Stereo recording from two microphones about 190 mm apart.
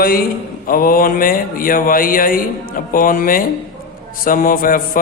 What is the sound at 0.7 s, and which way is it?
A man's voice, 50° left (ahead or behind).